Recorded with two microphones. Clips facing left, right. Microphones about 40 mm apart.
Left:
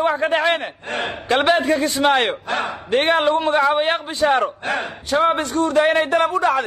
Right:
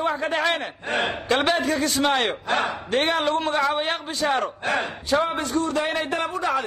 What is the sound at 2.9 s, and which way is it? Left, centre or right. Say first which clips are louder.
Speech: left 7 dB; left.